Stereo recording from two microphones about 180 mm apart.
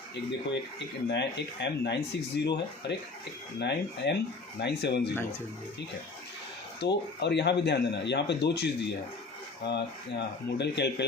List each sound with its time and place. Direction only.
1.1 s speech: 75° left (ahead or behind)
6.7 s speech: 70° left (ahead or behind)